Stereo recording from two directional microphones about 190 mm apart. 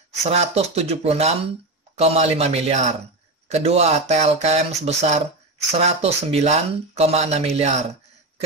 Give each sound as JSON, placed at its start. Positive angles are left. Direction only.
{"t": 0.2, "sound": "speech", "side_deg": -35}